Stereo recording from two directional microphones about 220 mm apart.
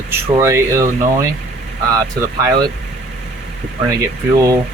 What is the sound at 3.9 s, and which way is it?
Speech, 15° right (ahead or behind).